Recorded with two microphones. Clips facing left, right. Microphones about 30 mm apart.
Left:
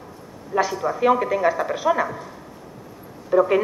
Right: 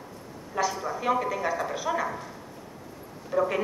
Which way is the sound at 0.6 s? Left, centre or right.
Centre.